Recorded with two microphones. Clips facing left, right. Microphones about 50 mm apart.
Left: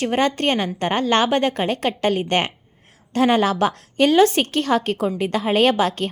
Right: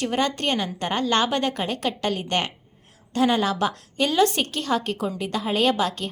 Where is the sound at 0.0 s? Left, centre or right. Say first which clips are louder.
Left 4 dB; left.